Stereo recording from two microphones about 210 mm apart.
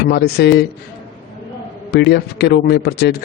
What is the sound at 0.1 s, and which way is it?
Speech, 50° left (ahead or behind).